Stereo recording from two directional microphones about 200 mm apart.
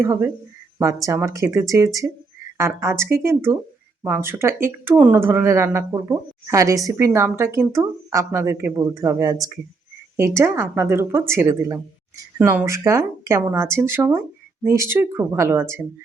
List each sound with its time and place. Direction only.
0.0 s speech: 10° right (ahead or behind)